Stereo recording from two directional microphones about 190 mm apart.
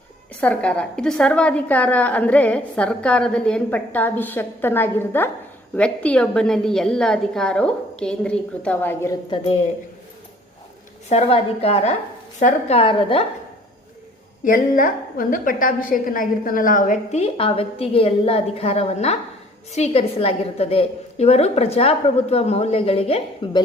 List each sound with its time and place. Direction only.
0.3 s a woman's voice: 5° left (ahead or behind)
11.1 s a woman's voice: 35° left (ahead or behind)
14.4 s a woman's voice: 45° left (ahead or behind); by 23.6 s 25° left (ahead or behind)